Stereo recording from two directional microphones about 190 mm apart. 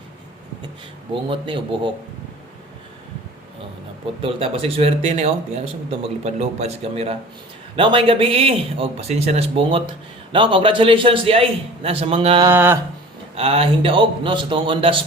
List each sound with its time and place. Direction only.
1.1 s speech: 25° right (ahead or behind)
4.2 s speech: 30° right (ahead or behind)
12.5 s a sound: 10° right (ahead or behind)
13.3 s speech: 30° right (ahead or behind)